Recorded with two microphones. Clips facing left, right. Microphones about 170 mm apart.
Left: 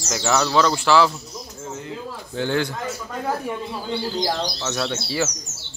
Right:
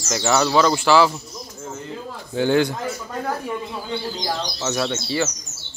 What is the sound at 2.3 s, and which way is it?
Speech, 15° right (ahead or behind).